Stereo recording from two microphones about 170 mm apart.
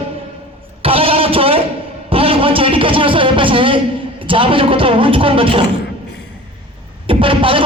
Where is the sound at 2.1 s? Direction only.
35° right (ahead or behind).